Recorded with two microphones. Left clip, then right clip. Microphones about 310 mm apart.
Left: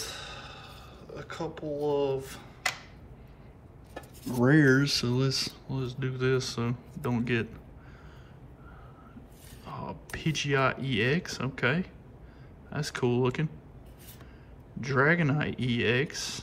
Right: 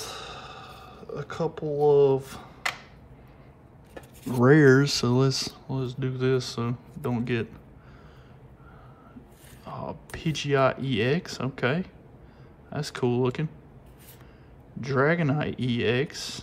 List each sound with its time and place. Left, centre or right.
0.0 s a sound: centre
4.5 s speech: centre
9.7 s speech: centre
14.8 s speech: centre